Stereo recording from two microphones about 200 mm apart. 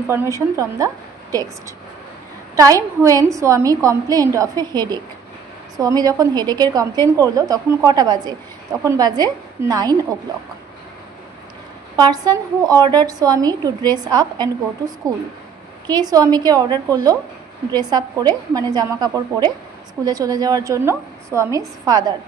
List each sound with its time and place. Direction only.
0.1 s a woman's voice: 15° right (ahead or behind)
2.5 s a woman's voice: 15° right (ahead or behind)
12.0 s a woman's voice: 20° right (ahead or behind)
15.9 s a woman's voice: 20° right (ahead or behind)